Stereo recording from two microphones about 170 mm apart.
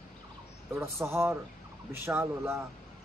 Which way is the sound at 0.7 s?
15° right (ahead or behind).